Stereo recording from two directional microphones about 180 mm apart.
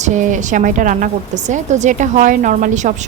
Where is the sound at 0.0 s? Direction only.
45° right (ahead or behind).